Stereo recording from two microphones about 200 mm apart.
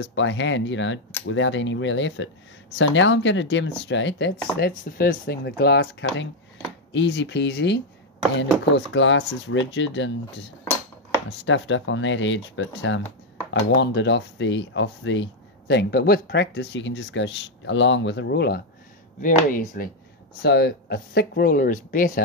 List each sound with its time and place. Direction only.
0.0 s speech: 65° left (ahead or behind)
13.5 s speech: 60° left (ahead or behind)
15.7 s speech: 55° left (ahead or behind)
19.2 s speech: 40° left (ahead or behind)
20.4 s speech: 55° left (ahead or behind)